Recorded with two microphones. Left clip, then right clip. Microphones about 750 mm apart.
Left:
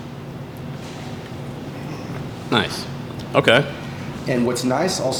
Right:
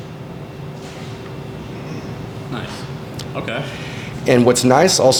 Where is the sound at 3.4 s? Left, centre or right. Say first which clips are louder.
Left 11 dB; left.